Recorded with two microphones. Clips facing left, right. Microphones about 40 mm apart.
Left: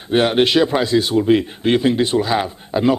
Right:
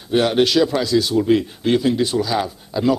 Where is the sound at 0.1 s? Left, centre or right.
Left.